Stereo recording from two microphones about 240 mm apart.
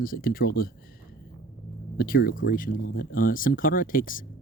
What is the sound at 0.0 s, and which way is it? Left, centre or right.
Speech, left.